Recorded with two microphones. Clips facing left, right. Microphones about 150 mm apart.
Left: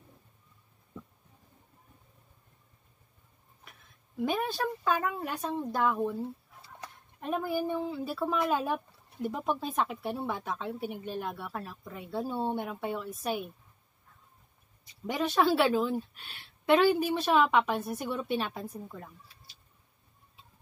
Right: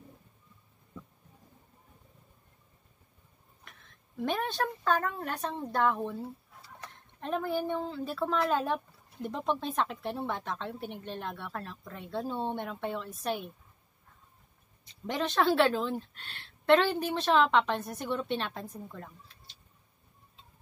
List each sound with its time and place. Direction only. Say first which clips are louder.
3.6 s a woman's voice: even; 5° left (ahead or behind)
15.0 s a woman's voice: left 1 dB; 5° left (ahead or behind)